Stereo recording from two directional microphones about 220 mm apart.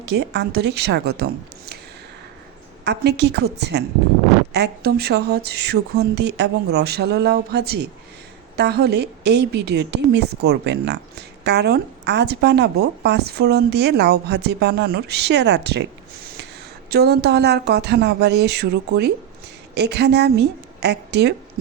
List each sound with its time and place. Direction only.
0.0 s a woman's voice: 50° right (ahead or behind)
2.8 s a woman's voice: 50° right (ahead or behind)
16.9 s a woman's voice: 45° right (ahead or behind)